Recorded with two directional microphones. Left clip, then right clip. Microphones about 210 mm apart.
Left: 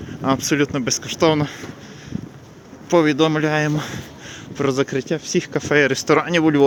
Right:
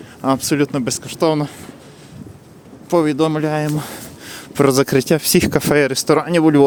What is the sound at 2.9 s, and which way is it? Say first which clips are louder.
Speech: even; 10° right (ahead or behind).